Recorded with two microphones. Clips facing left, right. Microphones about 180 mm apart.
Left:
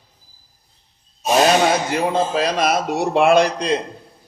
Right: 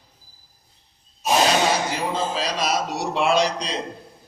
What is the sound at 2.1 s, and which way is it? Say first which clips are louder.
Speech: left 6 dB; 55° left (ahead or behind).